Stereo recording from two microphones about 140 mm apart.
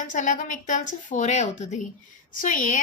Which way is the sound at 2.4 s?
70° left (ahead or behind).